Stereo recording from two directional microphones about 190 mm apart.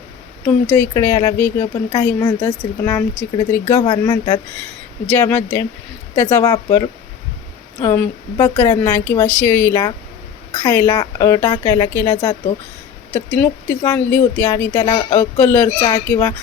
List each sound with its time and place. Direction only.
0.4 s speech: 10° left (ahead or behind)